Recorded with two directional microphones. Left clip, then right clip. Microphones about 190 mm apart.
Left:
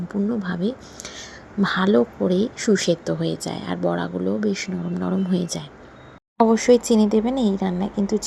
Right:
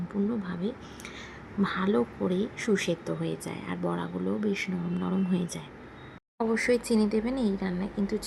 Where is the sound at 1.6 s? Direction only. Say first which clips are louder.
Left 9 dB; 25° left (ahead or behind).